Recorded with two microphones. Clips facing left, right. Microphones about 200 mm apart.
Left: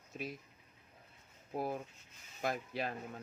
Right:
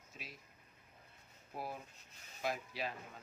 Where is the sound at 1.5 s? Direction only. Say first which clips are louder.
Left 7 dB; 50° left (ahead or behind).